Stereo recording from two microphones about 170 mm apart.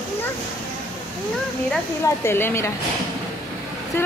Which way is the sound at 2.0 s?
15° left (ahead or behind).